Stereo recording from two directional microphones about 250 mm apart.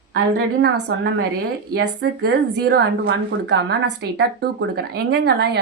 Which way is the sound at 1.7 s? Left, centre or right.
Right.